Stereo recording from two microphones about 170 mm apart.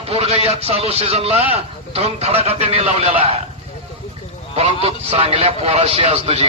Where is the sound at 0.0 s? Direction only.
35° right (ahead or behind).